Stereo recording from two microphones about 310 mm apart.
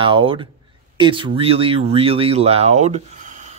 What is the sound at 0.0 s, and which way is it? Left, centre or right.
Speech, centre.